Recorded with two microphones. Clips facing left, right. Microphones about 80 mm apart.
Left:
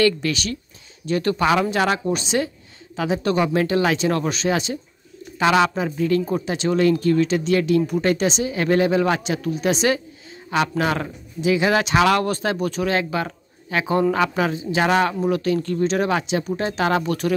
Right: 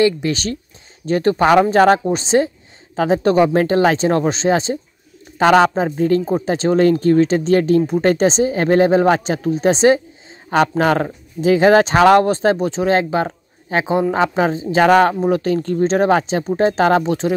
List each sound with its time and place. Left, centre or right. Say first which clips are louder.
0.3 s speech: right 4 dB; right
10.8 s speech: right 6 dB; right
14.8 s speech: right 7 dB; right